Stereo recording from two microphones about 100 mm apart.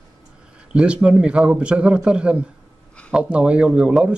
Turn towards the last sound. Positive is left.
turn(degrees=-10)  # may be behind; listen again after turning